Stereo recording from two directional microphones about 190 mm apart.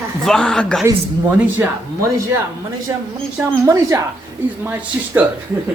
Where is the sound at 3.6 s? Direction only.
15° right (ahead or behind).